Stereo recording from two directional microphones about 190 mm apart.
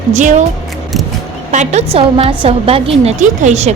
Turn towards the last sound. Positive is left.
turn(degrees=-35)  # may be behind; listen again after turning